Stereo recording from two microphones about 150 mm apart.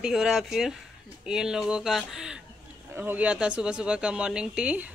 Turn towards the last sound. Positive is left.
turn(degrees=-10)  # may be behind; listen again after turning